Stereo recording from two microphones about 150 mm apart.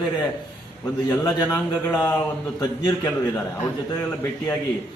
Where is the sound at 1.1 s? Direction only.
20° left (ahead or behind).